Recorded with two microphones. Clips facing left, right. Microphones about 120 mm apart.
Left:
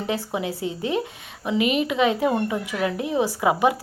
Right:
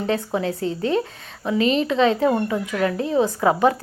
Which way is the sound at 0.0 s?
15° left (ahead or behind).